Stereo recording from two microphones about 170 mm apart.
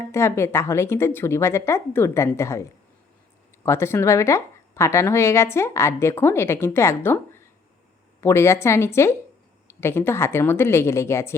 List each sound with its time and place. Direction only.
0.1 s speech: 15° left (ahead or behind)